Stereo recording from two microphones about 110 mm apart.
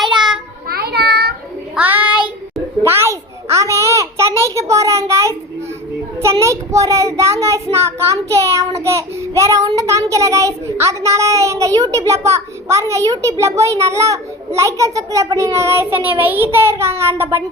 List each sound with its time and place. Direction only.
1.7 s child singing: 15° right (ahead or behind)
2.8 s a sound: 25° right (ahead or behind)
6.4 s a child's voice: 30° right (ahead or behind)